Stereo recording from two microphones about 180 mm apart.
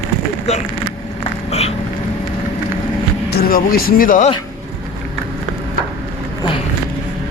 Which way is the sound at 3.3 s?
55° left (ahead or behind).